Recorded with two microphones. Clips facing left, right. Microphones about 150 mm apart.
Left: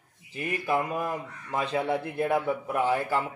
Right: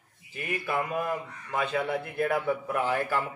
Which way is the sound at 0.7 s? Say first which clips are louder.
Left 1 dB; 30° left (ahead or behind).